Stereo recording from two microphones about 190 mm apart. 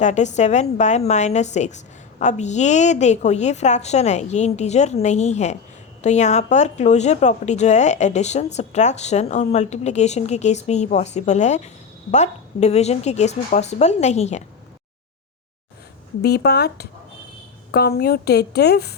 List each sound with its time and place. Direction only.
0.0 s speech: 35° left (ahead or behind)
16.2 s a woman's voice: 60° left (ahead or behind)